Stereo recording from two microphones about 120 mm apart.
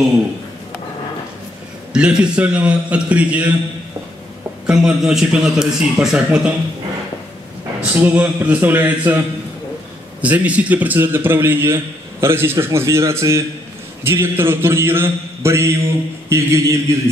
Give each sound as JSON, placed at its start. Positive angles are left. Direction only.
{"t": 2.0, "sound": "a man's voice", "side_deg": -10}
{"t": 4.6, "sound": "a man's voice", "side_deg": -5}
{"t": 7.9, "sound": "a man's voice", "side_deg": -15}
{"t": 10.2, "sound": "a man's voice", "side_deg": -10}